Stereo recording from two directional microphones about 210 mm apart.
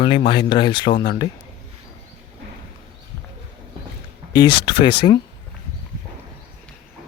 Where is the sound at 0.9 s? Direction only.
45° left (ahead or behind).